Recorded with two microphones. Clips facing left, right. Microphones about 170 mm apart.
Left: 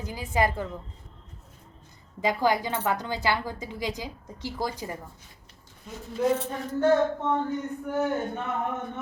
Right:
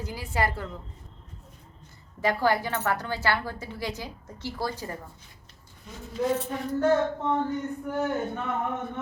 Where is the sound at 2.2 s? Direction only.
15° left (ahead or behind).